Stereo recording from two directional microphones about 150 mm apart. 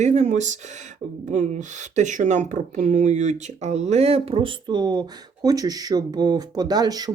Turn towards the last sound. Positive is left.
turn(degrees=-25)  # may be behind; listen again after turning